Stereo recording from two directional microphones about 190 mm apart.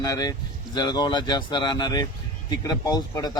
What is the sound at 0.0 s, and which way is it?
A man's voice, 20° left (ahead or behind).